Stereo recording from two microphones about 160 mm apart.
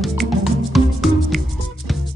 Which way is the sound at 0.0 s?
Centre (ahead or behind).